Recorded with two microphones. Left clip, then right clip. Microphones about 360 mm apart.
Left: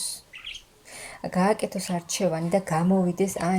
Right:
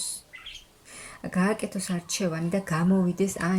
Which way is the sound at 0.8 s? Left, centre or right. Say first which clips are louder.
Left 4 dB; centre.